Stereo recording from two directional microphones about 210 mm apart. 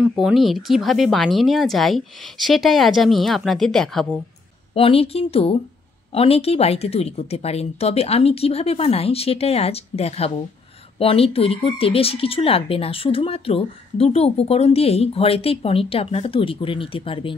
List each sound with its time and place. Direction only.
0.1 s speech: centre (ahead or behind)
4.7 s speech: 25° left (ahead or behind)